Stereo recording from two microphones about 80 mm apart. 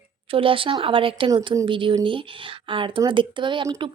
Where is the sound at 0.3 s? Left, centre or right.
Right.